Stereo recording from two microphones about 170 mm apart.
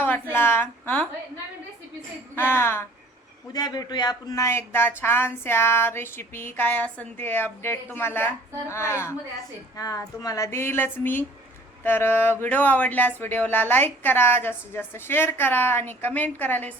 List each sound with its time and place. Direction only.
0.0 s a woman's voice: 10° left (ahead or behind)
2.3 s speech: 15° left (ahead or behind)